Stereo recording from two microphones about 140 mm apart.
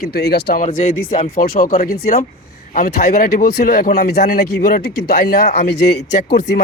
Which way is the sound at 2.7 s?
65° left (ahead or behind).